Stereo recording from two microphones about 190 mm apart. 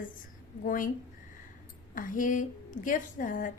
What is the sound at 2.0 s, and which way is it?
A woman's voice, 45° left (ahead or behind).